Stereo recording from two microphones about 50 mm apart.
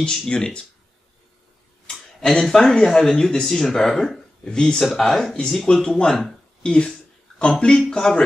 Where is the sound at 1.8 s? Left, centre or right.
Centre.